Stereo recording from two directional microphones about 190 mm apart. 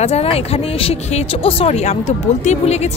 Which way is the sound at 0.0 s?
35° left (ahead or behind).